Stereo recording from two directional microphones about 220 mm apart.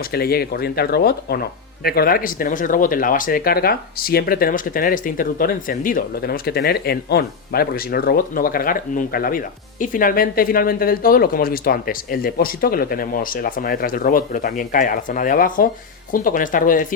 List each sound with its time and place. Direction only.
0.1 s speech: 45° left (ahead or behind)